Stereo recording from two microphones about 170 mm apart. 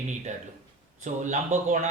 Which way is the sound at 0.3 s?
45° right (ahead or behind).